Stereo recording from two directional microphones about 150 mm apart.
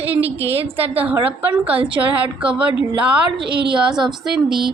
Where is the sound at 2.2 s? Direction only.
5° right (ahead or behind).